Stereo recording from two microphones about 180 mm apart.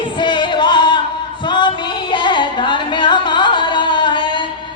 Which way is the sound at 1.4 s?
25° left (ahead or behind).